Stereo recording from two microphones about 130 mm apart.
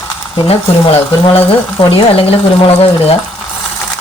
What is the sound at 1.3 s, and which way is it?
Speech, 45° left (ahead or behind).